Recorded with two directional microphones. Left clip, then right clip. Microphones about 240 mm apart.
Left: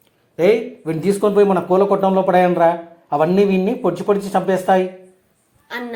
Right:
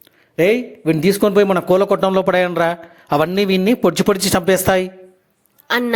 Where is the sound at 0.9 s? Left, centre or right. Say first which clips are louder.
Right 1 dB; right.